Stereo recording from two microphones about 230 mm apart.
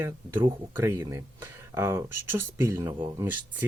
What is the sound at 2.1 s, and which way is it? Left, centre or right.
Speech, right.